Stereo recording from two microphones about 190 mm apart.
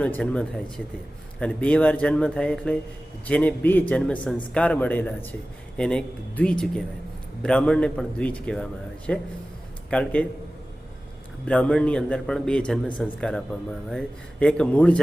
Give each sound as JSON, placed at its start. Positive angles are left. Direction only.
{"t": 0.0, "sound": "a man's voice", "side_deg": 5}
{"t": 11.4, "sound": "speech", "side_deg": 5}